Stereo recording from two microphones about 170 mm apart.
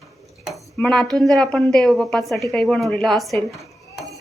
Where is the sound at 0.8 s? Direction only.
5° left (ahead or behind).